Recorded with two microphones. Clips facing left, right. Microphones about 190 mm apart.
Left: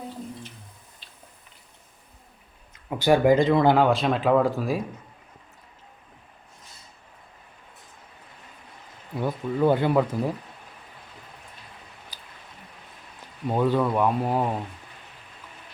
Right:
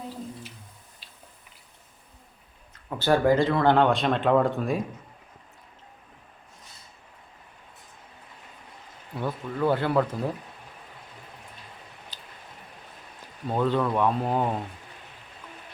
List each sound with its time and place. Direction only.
2.9 s speech: 15° left (ahead or behind)
9.1 s speech: 15° left (ahead or behind)
12.1 s a sound: 10° left (ahead or behind)
13.5 s speech: 10° left (ahead or behind)